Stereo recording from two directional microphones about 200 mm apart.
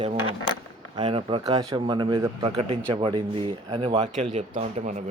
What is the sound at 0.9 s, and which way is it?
Speech, 25° right (ahead or behind).